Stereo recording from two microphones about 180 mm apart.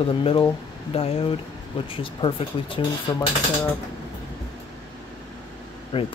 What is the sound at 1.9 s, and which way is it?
Speech, 30° left (ahead or behind).